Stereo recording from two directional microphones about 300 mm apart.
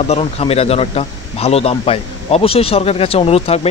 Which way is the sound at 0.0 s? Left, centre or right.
Centre.